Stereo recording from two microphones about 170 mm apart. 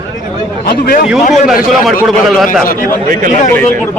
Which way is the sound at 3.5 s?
10° left (ahead or behind).